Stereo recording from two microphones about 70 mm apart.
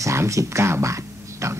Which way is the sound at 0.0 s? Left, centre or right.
Right.